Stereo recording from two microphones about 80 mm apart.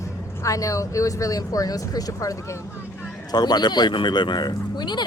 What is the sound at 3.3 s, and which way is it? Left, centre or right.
Speech, left.